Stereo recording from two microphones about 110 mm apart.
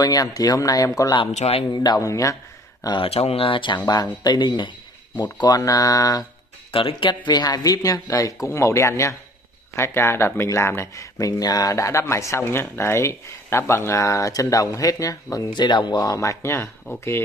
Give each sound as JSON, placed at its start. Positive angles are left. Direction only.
{"t": 0.0, "sound": "speech", "side_deg": 35}
{"t": 1.3, "sound": "speech", "side_deg": 65}
{"t": 1.7, "sound": "speech", "side_deg": 40}
{"t": 3.0, "sound": "speech", "side_deg": 65}
{"t": 6.7, "sound": "speech", "side_deg": 50}